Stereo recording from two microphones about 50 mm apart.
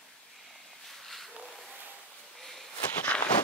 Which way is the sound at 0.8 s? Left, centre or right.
Centre.